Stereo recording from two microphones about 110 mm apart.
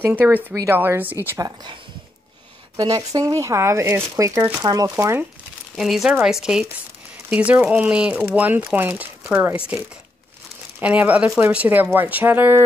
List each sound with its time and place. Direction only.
0.0 s speech: 15° right (ahead or behind)
1.4 s speech: 40° right (ahead or behind)
2.8 s speech: 35° right (ahead or behind)
4.6 s speech: 35° right (ahead or behind)
4.9 s speech: 20° right (ahead or behind)
5.8 s speech: centre (ahead or behind); by 9.6 s 20° right (ahead or behind)
10.8 s speech: 15° right (ahead or behind)